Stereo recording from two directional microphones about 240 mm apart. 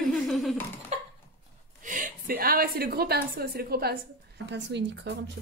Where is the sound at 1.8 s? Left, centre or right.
Right.